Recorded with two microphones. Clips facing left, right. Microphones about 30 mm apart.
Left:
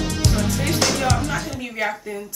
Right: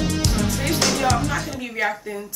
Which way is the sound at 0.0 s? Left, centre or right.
Centre.